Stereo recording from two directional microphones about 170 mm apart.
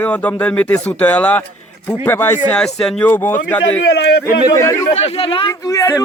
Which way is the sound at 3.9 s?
80° left.